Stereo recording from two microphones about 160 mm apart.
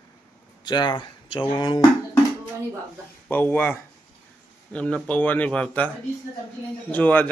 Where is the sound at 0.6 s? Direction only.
25° left (ahead or behind).